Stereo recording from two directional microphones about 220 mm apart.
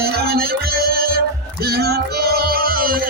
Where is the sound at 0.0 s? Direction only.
45° right (ahead or behind).